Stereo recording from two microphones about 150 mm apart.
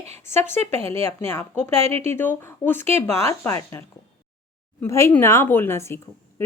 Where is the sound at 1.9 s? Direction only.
45° right (ahead or behind).